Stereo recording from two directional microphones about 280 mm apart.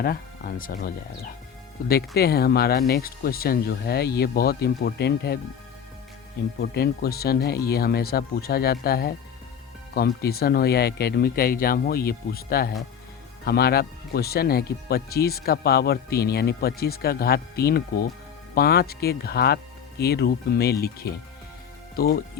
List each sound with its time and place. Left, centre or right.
0.0 s speech: left
6.7 s speech: left